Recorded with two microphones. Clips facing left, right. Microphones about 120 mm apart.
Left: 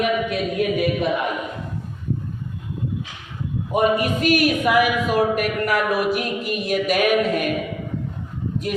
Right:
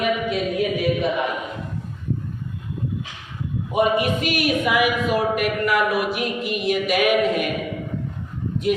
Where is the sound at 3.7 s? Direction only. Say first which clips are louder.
Even; 45° left (ahead or behind).